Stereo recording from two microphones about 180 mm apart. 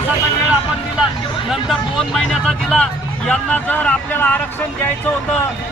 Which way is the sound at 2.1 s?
Centre (ahead or behind).